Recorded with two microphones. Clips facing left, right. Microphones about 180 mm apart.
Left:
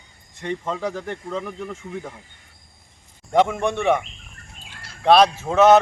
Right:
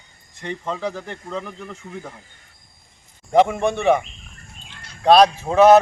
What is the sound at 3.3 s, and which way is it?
Speech, centre (ahead or behind).